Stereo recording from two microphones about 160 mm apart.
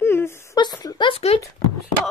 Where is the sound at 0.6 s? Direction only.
25° left (ahead or behind).